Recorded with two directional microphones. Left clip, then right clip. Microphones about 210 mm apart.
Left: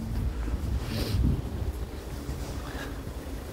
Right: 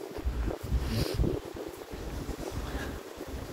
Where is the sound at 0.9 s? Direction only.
20° left (ahead or behind).